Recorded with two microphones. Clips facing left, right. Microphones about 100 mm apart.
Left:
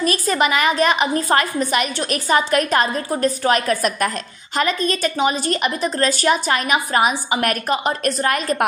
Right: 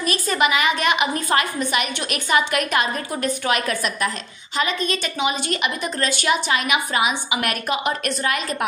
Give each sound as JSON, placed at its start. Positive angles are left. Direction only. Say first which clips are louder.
{"t": 0.0, "sound": "a woman's voice", "louder": "left 2 dB", "side_deg": 40}